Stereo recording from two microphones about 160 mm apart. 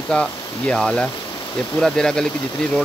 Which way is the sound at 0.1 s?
5° left (ahead or behind).